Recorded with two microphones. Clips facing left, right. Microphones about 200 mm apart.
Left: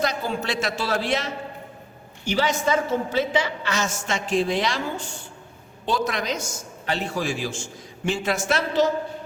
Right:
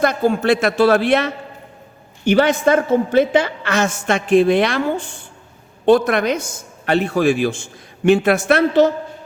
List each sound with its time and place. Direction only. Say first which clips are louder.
0.0 s speech: right 9 dB; 55° right (ahead or behind)